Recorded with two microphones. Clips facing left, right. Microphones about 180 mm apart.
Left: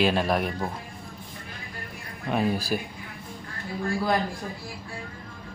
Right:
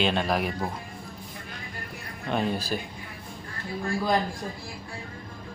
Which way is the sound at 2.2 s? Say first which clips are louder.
Left 2 dB; 5° left (ahead or behind).